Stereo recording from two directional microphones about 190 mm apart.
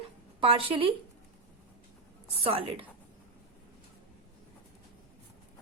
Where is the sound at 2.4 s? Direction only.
30° right (ahead or behind).